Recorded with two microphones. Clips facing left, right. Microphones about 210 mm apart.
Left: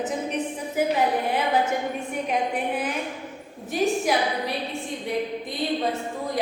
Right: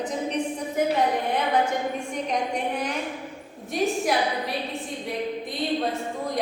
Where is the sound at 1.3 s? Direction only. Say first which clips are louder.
Even; 5° left (ahead or behind).